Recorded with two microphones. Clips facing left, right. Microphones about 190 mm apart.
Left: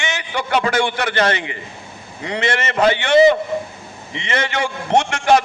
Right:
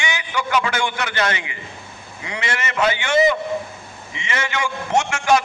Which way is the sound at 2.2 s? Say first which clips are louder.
Left 6 dB; 35° left (ahead or behind).